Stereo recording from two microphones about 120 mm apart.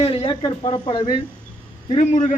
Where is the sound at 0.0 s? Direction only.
55° left (ahead or behind).